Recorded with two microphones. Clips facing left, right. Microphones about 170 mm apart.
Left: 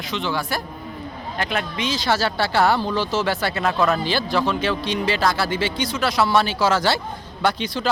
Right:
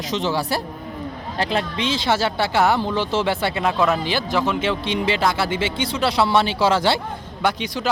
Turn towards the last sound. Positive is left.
turn(degrees=-15)  # may be behind; listen again after turning